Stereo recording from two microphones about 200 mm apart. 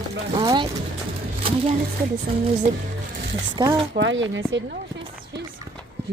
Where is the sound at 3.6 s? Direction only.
20° right (ahead or behind).